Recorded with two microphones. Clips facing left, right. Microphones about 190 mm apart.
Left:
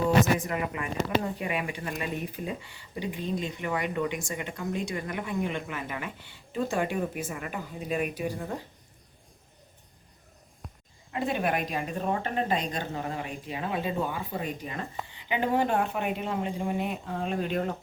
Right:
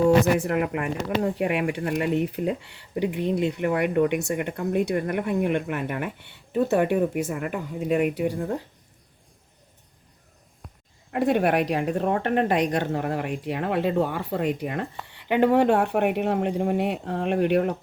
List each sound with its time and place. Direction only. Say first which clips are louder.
0.3 s speech: right 7 dB; 65° right (ahead or behind)
11.1 s speech: right 7 dB; 65° right (ahead or behind)